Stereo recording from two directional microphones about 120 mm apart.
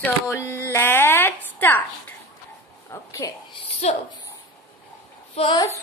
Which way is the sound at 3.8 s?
65° left (ahead or behind).